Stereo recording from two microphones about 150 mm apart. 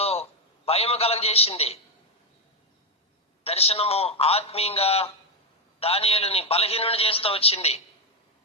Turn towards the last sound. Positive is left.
turn(degrees=45)  # may be behind; listen again after turning